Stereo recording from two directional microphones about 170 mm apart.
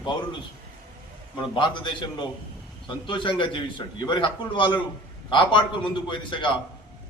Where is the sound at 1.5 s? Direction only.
30° left (ahead or behind).